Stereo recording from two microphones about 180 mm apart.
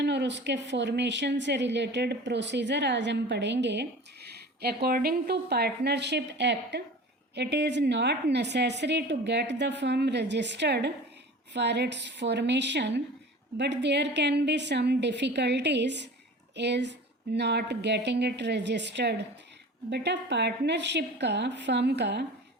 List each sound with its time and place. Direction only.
0.0 s speech: 75° right (ahead or behind)